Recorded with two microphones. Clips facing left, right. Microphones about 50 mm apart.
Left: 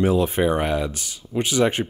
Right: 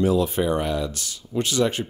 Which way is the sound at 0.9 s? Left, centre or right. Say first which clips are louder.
Left 1 dB; centre.